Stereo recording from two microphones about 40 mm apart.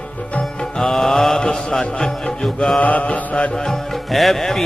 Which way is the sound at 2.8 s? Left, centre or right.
Left.